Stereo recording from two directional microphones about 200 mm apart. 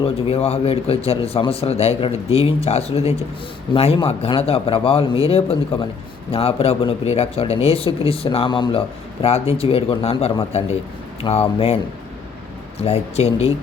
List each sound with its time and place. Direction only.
0.0 s speech: 30° left (ahead or behind)
12.8 s speech: 30° left (ahead or behind)